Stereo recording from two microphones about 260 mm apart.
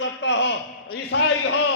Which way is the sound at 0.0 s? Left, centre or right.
Left.